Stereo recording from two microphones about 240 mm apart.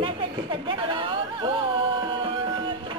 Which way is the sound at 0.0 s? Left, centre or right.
Centre.